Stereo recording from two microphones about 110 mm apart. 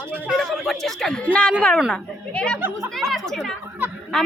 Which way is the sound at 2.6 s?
20° right (ahead or behind).